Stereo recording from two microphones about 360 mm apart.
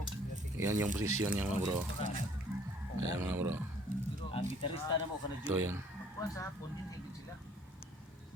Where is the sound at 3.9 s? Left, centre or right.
Right.